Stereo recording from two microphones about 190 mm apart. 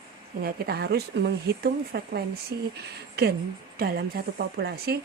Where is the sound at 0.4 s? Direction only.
55° right (ahead or behind).